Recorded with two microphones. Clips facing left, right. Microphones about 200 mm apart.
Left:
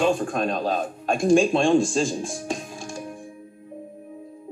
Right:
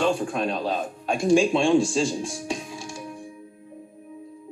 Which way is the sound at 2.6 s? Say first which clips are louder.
Left 1 dB; 45° left (ahead or behind).